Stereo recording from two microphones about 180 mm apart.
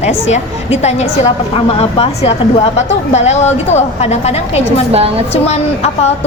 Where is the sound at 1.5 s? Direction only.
35° left (ahead or behind).